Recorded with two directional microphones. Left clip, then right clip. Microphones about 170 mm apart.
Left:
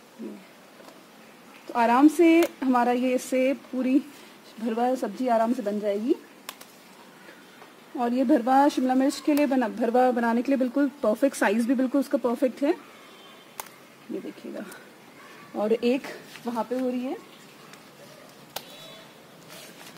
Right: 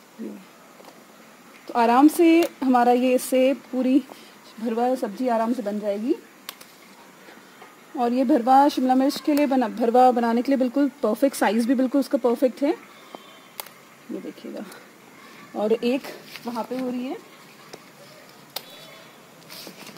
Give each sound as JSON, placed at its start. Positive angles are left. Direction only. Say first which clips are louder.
{"t": 1.7, "sound": "speech", "louder": "right 3 dB", "side_deg": -55}
{"t": 4.6, "sound": "speech", "louder": "right 2 dB", "side_deg": -30}
{"t": 8.0, "sound": "speech", "louder": "right 2 dB", "side_deg": -40}
{"t": 15.5, "sound": "speech", "louder": "right 2 dB", "side_deg": -35}